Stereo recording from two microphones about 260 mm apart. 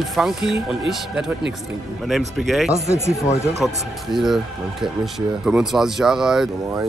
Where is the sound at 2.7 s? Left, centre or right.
Right.